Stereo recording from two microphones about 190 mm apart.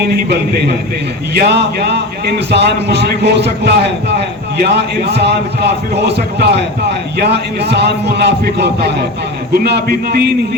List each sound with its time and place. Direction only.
0.1 s a man's voice: 60° right (ahead or behind)